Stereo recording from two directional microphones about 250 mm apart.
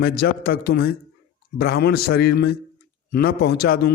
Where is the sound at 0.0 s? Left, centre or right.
Left.